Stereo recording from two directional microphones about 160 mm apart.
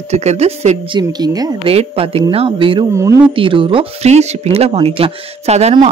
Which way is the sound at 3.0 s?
20° right (ahead or behind).